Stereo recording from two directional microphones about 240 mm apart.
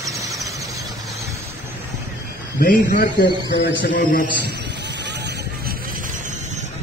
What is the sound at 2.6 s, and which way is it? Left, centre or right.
A man's voice, left.